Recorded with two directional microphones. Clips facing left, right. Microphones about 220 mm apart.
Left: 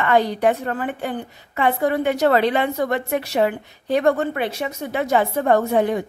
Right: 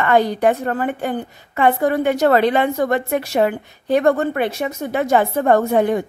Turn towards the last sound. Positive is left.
turn(degrees=-50)  # may be behind; listen again after turning